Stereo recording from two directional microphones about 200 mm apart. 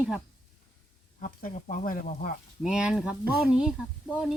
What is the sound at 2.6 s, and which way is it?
Speech, 5° right (ahead or behind).